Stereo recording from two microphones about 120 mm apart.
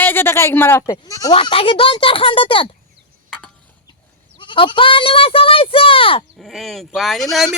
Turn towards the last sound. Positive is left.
turn(degrees=0)  # may be behind; listen again after turning